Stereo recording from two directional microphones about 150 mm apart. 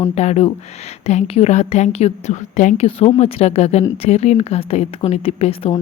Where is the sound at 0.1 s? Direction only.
45° left (ahead or behind).